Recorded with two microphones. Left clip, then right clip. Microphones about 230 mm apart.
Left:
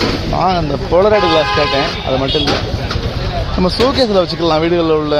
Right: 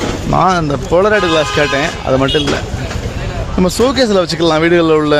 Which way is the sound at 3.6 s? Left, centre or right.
Centre.